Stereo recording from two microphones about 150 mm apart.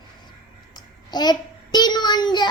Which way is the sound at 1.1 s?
30° left (ahead or behind).